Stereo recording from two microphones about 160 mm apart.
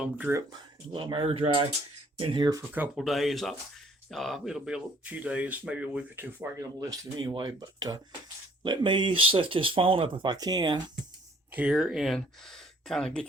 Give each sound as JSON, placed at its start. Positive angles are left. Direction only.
{"t": 0.0, "sound": "speech", "side_deg": -10}
{"t": 0.5, "sound": "speech", "side_deg": -25}
{"t": 2.7, "sound": "speech", "side_deg": -5}
{"t": 6.7, "sound": "speech", "side_deg": -25}
{"t": 11.5, "sound": "speech", "side_deg": -5}